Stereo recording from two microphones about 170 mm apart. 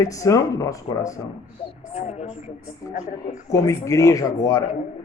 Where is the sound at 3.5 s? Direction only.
20° left (ahead or behind).